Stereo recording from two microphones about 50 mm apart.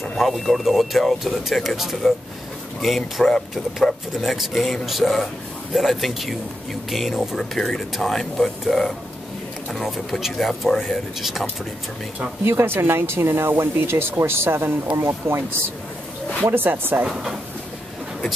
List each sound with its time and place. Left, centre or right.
0.2 s a man's voice: centre
12.4 s speech: right
16.4 s speech: right
17.1 s a man's voice: centre